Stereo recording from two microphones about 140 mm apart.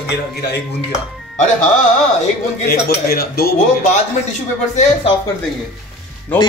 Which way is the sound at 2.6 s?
90° left.